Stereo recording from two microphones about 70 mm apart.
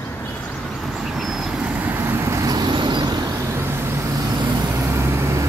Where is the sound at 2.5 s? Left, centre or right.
Right.